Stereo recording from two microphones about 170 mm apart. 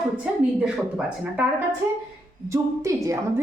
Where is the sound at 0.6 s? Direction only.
5° right (ahead or behind).